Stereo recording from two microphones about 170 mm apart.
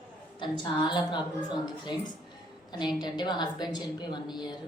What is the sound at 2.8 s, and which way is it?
A woman's voice, 25° left (ahead or behind).